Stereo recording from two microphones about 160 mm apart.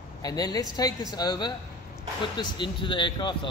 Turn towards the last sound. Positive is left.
turn(degrees=30)  # may be behind; listen again after turning